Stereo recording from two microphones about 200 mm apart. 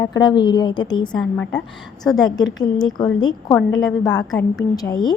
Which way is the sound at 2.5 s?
20° left (ahead or behind).